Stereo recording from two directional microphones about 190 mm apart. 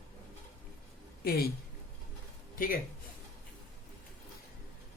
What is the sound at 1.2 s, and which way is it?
Speech, 55° left (ahead or behind).